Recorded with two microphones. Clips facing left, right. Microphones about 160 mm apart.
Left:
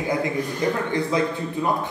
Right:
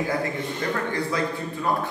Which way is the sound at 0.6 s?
20° left (ahead or behind).